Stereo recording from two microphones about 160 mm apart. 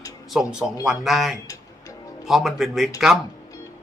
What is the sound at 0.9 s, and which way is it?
Speech, centre (ahead or behind).